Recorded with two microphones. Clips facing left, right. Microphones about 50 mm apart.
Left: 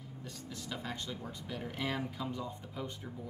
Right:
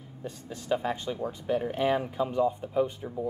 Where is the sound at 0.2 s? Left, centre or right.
Right.